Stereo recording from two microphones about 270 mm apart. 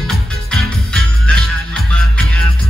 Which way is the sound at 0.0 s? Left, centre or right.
Centre.